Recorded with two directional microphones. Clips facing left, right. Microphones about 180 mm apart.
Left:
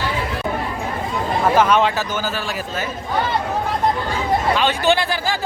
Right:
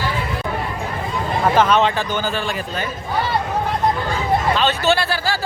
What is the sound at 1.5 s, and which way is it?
Speech, 10° left (ahead or behind).